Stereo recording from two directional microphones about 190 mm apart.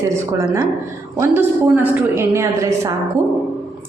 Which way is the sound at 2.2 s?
15° right (ahead or behind).